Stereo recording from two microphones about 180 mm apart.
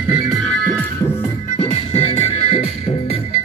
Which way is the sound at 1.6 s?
35° left (ahead or behind).